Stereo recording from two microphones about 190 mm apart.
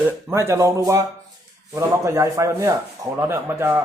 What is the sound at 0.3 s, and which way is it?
Speech, 15° right (ahead or behind).